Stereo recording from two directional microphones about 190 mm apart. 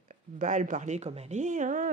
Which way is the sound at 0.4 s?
40° right (ahead or behind).